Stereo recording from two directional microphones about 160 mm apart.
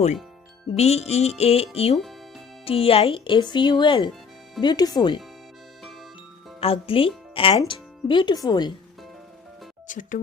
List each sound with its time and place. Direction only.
0.8 s speech: 40° left (ahead or behind); by 5.2 s 25° left (ahead or behind)
6.6 s speech: 35° left (ahead or behind)
9.8 s speech: 55° left (ahead or behind)